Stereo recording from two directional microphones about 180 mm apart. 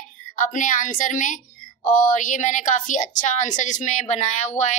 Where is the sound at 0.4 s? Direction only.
45° left (ahead or behind).